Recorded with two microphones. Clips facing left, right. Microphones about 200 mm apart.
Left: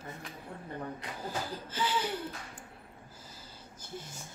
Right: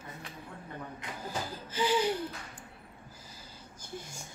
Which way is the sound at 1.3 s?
10° right (ahead or behind).